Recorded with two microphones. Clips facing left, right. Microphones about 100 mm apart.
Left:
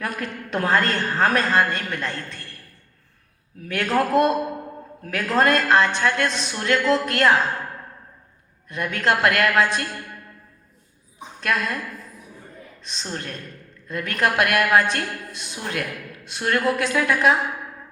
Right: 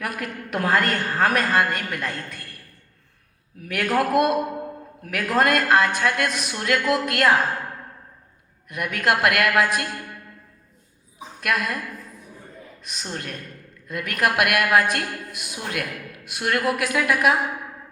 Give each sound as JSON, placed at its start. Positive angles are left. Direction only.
{"t": 0.0, "sound": "a woman's voice", "side_deg": 30}
{"t": 3.6, "sound": "a woman's voice", "side_deg": 30}
{"t": 8.7, "sound": "a woman's voice", "side_deg": 30}
{"t": 11.3, "sound": "a woman's voice", "side_deg": 30}
{"t": 12.8, "sound": "a woman's voice", "side_deg": 30}